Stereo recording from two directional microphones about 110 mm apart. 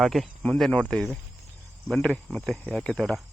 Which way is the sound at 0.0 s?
Centre (ahead or behind).